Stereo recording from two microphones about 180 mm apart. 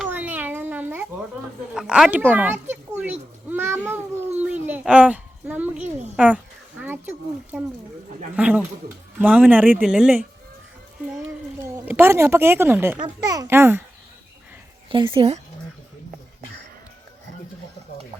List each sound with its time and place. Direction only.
0.0 s a sound: 10° right (ahead or behind)
1.7 s speech: 5° right (ahead or behind)
3.0 s a sound: 10° right (ahead or behind)
8.4 s speech: 5° right (ahead or behind)
11.6 s speech: 15° right (ahead or behind)
13.0 s a child's voice: 20° right (ahead or behind)
14.8 s a woman's voice: 30° right (ahead or behind)